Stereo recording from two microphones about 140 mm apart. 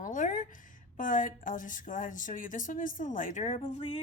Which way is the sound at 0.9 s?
70° left (ahead or behind).